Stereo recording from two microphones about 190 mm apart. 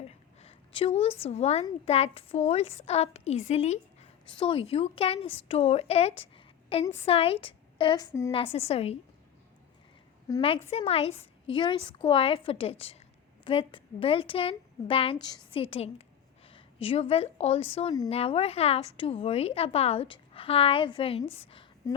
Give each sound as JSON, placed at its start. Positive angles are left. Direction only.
{"t": 0.0, "sound": "a sound", "side_deg": 35}
{"t": 1.2, "sound": "a woman's voice", "side_deg": 35}
{"t": 8.5, "sound": "a woman's voice", "side_deg": 30}
{"t": 10.3, "sound": "a woman's voice", "side_deg": 15}
{"t": 10.7, "sound": "a woman's voice", "side_deg": 30}
{"t": 21.2, "sound": "a woman's voice", "side_deg": 10}
{"t": 21.5, "sound": "a sound", "side_deg": 25}